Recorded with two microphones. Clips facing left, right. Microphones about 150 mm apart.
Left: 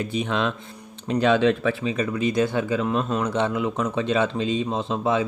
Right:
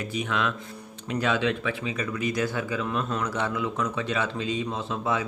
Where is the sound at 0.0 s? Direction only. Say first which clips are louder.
Left 4 dB; 25° left (ahead or behind).